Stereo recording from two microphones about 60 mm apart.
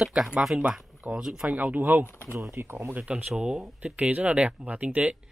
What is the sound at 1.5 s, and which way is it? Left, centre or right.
Speech, right.